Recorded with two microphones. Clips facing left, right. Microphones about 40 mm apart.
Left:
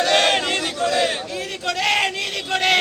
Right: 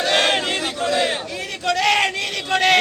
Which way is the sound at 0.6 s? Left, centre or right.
Centre.